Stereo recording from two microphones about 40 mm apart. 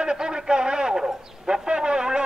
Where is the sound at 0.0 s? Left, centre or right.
Centre.